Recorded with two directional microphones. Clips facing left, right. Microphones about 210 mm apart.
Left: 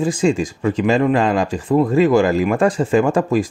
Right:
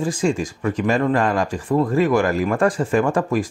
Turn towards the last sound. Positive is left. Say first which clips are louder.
# left 3 dB
turn(degrees=25)  # may be behind; listen again after turning